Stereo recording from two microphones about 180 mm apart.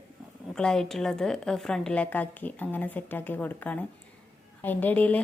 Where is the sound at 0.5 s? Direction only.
5° left (ahead or behind).